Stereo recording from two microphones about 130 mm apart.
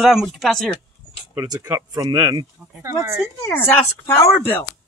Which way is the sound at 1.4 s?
25° right (ahead or behind).